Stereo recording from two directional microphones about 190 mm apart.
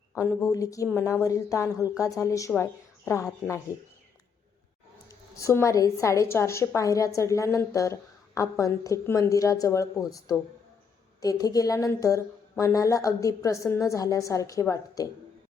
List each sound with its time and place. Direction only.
0.1 s a woman's voice: 10° left (ahead or behind)
5.0 s a woman's voice: 15° left (ahead or behind)